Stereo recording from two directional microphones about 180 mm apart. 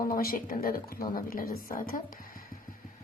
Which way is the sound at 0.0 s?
55° left (ahead or behind).